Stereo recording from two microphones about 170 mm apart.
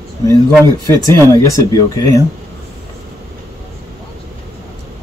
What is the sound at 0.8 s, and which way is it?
Speech, 15° left (ahead or behind).